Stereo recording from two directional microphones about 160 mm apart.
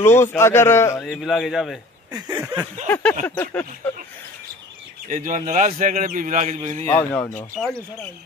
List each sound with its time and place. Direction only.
0.0 s a man's voice: 15° left (ahead or behind)
1.0 s speech: centre (ahead or behind)
2.1 s a sound: 25° right (ahead or behind)
2.4 s a sound: 10° right (ahead or behind)
2.9 s a man's voice: 10° left (ahead or behind)
5.1 s a man's voice: 55° right (ahead or behind)
7.0 s a man's voice: 15° left (ahead or behind)
7.6 s speech: 5° left (ahead or behind)